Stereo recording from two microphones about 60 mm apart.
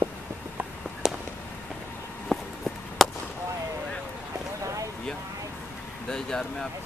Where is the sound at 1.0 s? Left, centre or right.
Centre.